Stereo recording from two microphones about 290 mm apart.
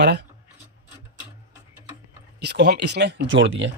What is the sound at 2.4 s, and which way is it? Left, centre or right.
Speech, right.